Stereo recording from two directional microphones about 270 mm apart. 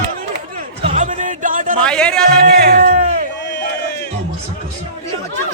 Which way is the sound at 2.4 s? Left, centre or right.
Right.